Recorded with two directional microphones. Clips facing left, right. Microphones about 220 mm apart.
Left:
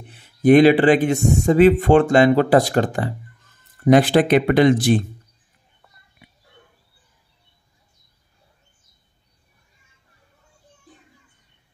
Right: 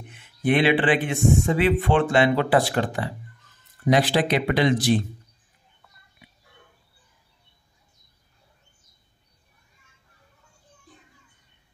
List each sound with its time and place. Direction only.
0.0 s speech: 35° left (ahead or behind); by 4.9 s 55° left (ahead or behind)